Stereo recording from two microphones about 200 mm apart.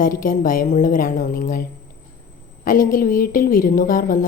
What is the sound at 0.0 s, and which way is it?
A woman's voice, 45° left (ahead or behind).